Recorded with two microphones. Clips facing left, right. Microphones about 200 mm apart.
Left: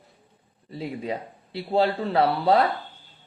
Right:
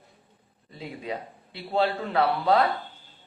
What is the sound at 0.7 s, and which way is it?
A woman's voice, 35° left (ahead or behind).